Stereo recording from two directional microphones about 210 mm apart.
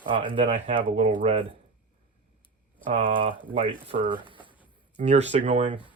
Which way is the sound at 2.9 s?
30° right (ahead or behind).